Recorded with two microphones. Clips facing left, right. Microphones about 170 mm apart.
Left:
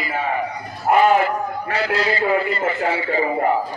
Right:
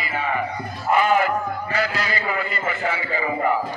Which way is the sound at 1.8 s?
30° left (ahead or behind).